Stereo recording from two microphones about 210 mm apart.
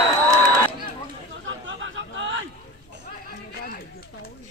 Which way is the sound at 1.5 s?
65° right (ahead or behind).